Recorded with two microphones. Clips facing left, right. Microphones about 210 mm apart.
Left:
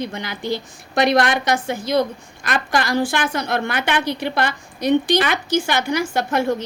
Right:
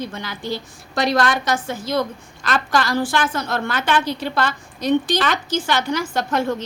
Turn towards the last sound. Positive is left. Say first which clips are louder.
# left 1 dB
turn(degrees=10)  # may be behind; listen again after turning